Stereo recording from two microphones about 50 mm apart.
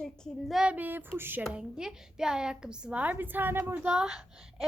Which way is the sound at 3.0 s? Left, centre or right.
Right.